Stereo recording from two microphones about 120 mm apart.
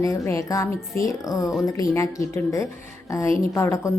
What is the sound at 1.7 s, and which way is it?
A woman's voice, 25° left (ahead or behind).